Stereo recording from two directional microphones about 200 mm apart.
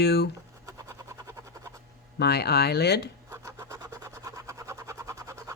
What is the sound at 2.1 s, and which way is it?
Speech, 55° left (ahead or behind).